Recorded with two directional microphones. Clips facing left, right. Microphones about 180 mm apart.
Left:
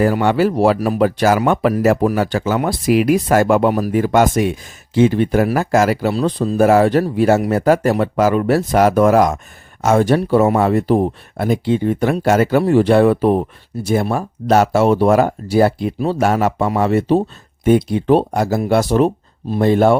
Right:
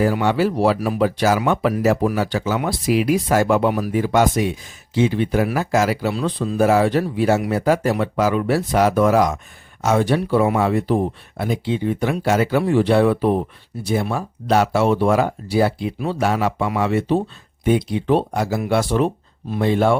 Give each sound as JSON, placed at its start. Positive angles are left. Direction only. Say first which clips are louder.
{"t": 0.0, "sound": "speech", "louder": "left 3 dB", "side_deg": 55}